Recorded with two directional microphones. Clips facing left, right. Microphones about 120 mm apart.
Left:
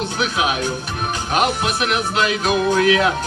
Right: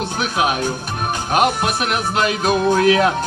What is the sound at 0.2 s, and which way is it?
Music, 45° right (ahead or behind).